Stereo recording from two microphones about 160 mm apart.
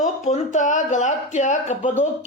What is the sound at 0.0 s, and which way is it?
Speech, 50° left (ahead or behind).